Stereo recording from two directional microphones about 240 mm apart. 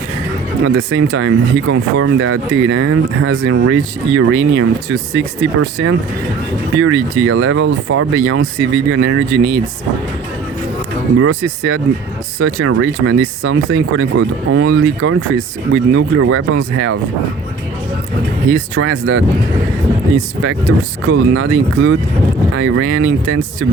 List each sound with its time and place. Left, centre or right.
0.6 s speech: right
11.2 s speech: right
18.5 s speech: right
21.1 s speech: right